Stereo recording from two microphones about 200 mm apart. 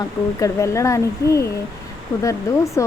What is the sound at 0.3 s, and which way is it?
Speech, 15° left (ahead or behind).